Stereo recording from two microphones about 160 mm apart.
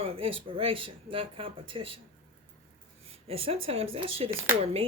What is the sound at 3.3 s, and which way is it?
Speech, 35° right (ahead or behind).